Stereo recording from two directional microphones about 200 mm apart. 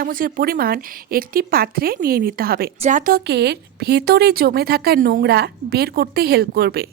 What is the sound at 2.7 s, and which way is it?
A woman's voice, 35° right (ahead or behind).